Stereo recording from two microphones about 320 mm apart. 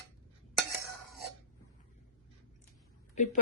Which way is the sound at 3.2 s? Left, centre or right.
Left.